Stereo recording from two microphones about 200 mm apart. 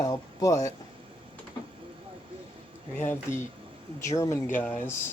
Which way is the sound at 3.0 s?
15° left (ahead or behind).